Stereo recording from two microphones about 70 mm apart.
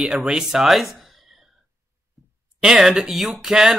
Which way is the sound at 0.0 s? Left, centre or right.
Centre.